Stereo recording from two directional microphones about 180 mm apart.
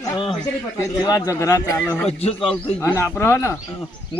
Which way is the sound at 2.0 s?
35° left (ahead or behind).